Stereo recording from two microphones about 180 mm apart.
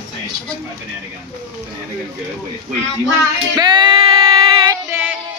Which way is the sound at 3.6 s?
25° right (ahead or behind).